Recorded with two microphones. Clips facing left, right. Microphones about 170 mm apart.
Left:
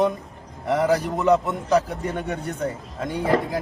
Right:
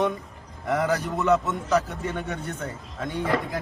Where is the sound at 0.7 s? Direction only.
10° left (ahead or behind).